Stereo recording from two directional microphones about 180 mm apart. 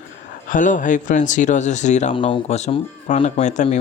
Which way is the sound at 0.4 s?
45° left (ahead or behind).